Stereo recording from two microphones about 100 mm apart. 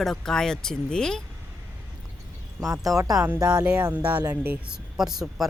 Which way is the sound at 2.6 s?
35° right (ahead or behind).